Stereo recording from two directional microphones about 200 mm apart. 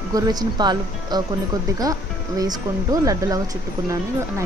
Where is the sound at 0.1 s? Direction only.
20° right (ahead or behind).